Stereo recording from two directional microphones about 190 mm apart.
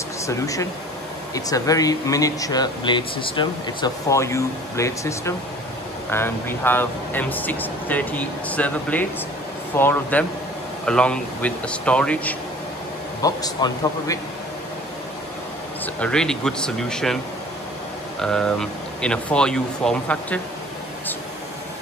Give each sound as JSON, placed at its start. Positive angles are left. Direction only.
{"t": 0.3, "sound": "speech", "side_deg": 15}
{"t": 13.2, "sound": "a man's voice", "side_deg": 20}
{"t": 15.8, "sound": "speech", "side_deg": 5}
{"t": 18.2, "sound": "speech", "side_deg": 5}